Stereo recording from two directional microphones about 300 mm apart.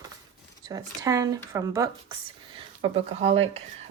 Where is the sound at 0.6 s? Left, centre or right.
Centre.